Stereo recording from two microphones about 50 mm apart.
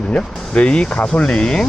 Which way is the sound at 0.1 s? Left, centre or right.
Left.